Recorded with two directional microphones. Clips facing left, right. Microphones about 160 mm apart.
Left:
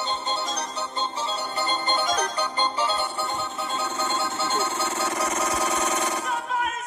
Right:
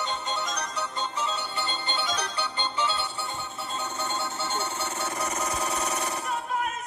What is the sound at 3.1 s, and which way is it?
Music, 70° left (ahead or behind).